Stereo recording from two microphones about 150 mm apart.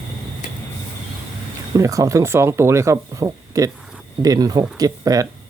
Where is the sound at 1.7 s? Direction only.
20° right (ahead or behind).